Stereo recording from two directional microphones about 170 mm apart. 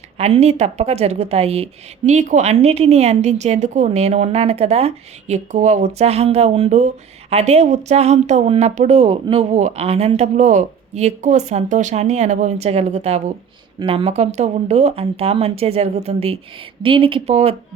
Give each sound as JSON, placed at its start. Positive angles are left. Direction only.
{"t": 0.2, "sound": "a woman's voice", "side_deg": -40}